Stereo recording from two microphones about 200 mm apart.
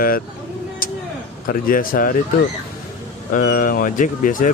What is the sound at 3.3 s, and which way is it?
Speech, 40° left (ahead or behind).